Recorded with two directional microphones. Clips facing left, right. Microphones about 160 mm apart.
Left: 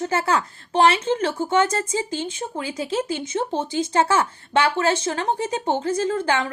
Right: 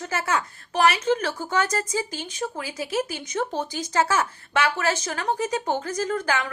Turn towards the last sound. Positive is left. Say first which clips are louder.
# left 3 dB
turn(degrees=30)  # may be behind; listen again after turning